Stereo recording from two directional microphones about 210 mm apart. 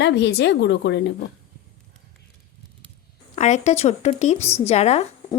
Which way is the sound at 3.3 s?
30° left (ahead or behind).